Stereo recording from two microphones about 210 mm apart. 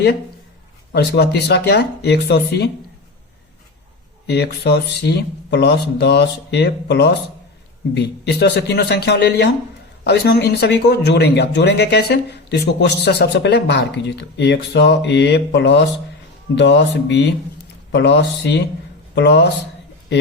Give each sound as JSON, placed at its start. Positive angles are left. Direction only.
{"t": 0.9, "sound": "speech", "side_deg": 50}
{"t": 4.3, "sound": "speech", "side_deg": 50}